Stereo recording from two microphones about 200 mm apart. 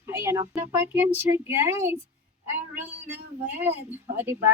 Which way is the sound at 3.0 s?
10° right (ahead or behind).